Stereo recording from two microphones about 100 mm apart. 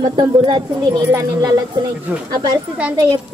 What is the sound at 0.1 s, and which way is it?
Speech, 45° right (ahead or behind).